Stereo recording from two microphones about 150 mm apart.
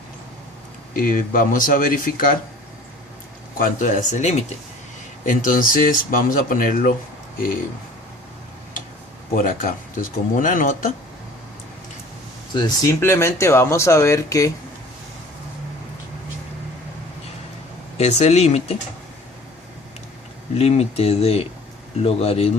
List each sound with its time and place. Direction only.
0.9 s speech: 65° left (ahead or behind)
3.6 s speech: 55° left (ahead or behind)
5.2 s speech: 65° left (ahead or behind)
9.3 s speech: 65° left (ahead or behind)
12.5 s speech: 25° left (ahead or behind)
17.9 s speech: 45° left (ahead or behind)
20.6 s speech: 45° left (ahead or behind)